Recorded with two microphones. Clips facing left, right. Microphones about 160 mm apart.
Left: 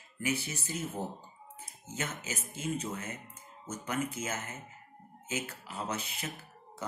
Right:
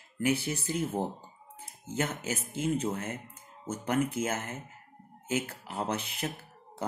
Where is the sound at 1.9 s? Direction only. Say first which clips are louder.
Right 6 dB; 55° right (ahead or behind).